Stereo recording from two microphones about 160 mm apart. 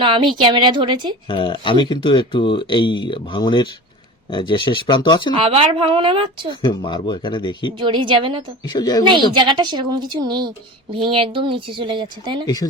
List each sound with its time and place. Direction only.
0.0 s a woman's voice: 30° right (ahead or behind)
1.3 s speech: 30° left (ahead or behind)
5.3 s a woman's voice: 35° right (ahead or behind)
6.6 s speech: 30° left (ahead or behind)
7.8 s a woman's voice: 30° right (ahead or behind)
8.6 s speech: 25° left (ahead or behind)
9.0 s a woman's voice: 30° right (ahead or behind)